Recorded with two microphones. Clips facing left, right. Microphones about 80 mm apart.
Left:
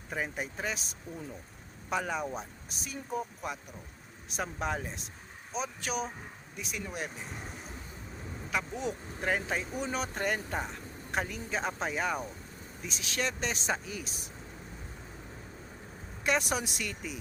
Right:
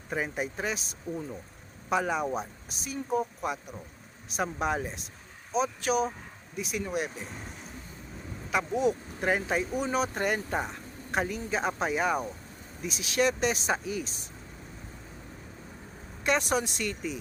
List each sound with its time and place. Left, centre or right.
0.1 s speech: centre
8.8 s speech: centre
16.2 s speech: centre